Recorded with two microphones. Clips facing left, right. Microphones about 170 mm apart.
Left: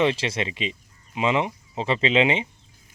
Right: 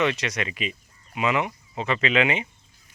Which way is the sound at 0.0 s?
30° left (ahead or behind).